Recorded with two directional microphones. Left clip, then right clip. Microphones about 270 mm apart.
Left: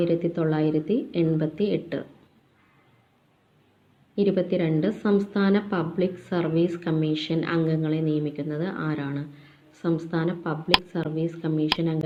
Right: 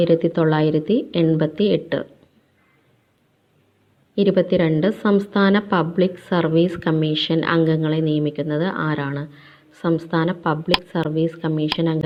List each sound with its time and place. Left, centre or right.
0.0 s a woman's voice: right
4.1 s a woman's voice: right